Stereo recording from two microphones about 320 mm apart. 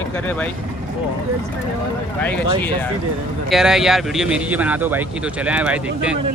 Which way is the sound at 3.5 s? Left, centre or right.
Centre.